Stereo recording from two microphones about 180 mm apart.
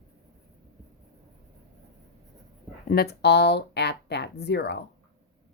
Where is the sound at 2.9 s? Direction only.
60° left (ahead or behind).